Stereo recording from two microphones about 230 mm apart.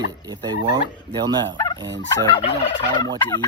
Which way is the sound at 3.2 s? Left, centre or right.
Centre.